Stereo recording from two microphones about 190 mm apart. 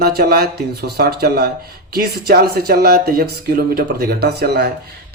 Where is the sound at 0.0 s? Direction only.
55° right (ahead or behind).